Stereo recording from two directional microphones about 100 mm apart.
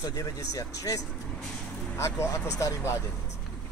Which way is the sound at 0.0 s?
35° left (ahead or behind).